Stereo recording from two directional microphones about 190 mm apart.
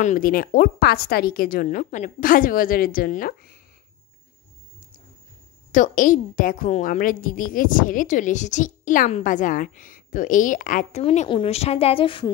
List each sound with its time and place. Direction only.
0.0 s a woman's voice: 45° left (ahead or behind)
5.7 s a woman's voice: 45° left (ahead or behind); by 12.3 s 25° left (ahead or behind)